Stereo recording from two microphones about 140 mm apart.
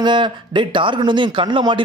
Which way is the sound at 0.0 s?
35° right (ahead or behind).